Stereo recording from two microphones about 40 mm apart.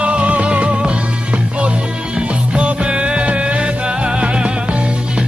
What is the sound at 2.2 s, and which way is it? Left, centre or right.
Music, right.